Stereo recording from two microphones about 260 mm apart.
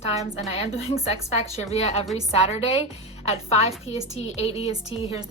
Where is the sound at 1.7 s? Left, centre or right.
Left.